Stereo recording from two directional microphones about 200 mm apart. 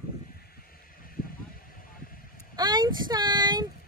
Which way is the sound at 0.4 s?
50° left (ahead or behind).